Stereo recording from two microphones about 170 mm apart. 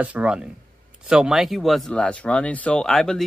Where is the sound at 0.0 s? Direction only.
5° right (ahead or behind).